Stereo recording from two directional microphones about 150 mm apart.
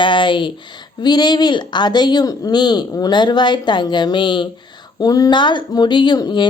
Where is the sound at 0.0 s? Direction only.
30° left (ahead or behind).